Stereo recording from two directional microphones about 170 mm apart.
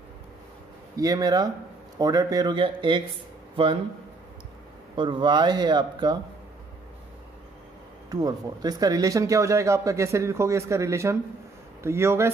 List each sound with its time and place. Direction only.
0.9 s speech: 20° right (ahead or behind)
4.9 s speech: 30° right (ahead or behind)
8.1 s speech: 20° right (ahead or behind)